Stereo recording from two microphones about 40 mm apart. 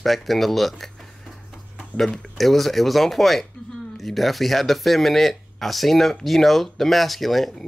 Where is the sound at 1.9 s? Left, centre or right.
Centre.